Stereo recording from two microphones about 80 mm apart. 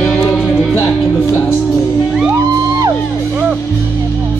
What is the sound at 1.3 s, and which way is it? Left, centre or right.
Music, left.